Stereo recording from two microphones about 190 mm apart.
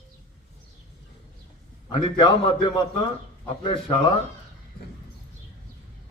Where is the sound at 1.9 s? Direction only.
25° left (ahead or behind).